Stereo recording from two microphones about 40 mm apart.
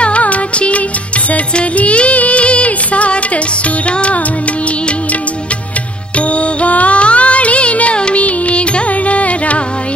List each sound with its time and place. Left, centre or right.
0.0 s music: left
6.1 s music: left